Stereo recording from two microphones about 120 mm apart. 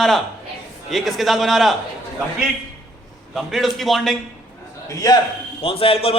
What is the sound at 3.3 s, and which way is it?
Speech, centre (ahead or behind).